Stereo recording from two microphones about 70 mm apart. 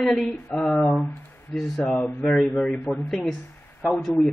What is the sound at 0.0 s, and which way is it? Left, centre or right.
Speech, centre.